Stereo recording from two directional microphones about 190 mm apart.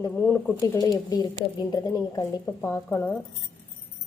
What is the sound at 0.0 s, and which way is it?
Speech, 10° left (ahead or behind).